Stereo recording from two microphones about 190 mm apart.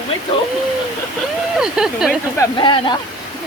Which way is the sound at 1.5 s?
5° right (ahead or behind).